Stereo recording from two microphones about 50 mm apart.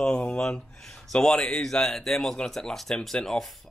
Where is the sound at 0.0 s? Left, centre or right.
Left.